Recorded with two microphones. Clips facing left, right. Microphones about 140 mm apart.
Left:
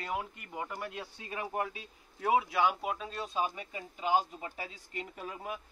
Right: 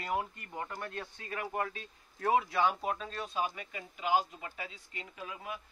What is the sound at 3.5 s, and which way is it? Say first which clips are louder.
A man's voice: left 2 dB; 30° left (ahead or behind).